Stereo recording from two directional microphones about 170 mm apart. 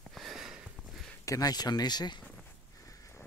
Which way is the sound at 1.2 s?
20° left (ahead or behind).